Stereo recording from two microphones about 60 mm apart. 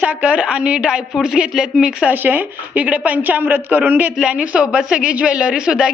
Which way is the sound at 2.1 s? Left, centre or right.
Right.